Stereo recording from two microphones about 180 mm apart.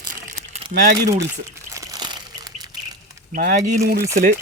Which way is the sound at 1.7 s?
20° right (ahead or behind).